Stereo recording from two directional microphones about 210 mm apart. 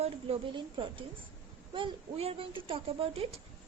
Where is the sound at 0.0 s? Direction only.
25° right (ahead or behind).